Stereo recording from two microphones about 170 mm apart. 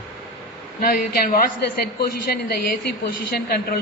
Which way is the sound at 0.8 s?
60° left (ahead or behind).